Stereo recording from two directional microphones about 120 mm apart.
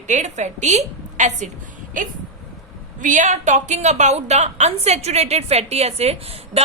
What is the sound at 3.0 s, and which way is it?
A woman's voice, 90° right.